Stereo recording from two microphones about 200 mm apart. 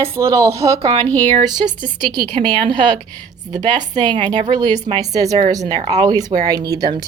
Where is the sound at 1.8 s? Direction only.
40° right (ahead or behind).